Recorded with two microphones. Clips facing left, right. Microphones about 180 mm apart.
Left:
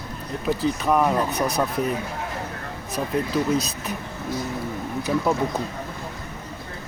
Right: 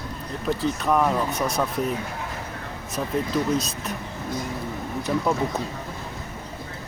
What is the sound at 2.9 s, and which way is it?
Speech, centre (ahead or behind).